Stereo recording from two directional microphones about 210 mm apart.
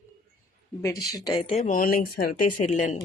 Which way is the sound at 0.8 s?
15° left (ahead or behind).